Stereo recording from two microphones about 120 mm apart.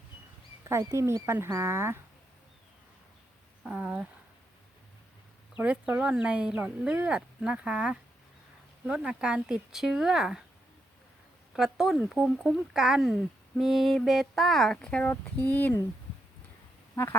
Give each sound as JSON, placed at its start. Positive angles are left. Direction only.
{"t": 0.6, "sound": "speech", "side_deg": -25}
{"t": 3.6, "sound": "speech", "side_deg": -10}
{"t": 5.5, "sound": "speech", "side_deg": -10}
{"t": 11.5, "sound": "speech", "side_deg": -5}
{"t": 16.9, "sound": "duck", "side_deg": 25}